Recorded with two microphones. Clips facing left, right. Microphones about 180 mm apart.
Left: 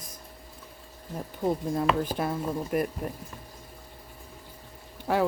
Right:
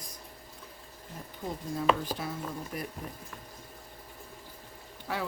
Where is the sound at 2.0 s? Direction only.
55° left (ahead or behind).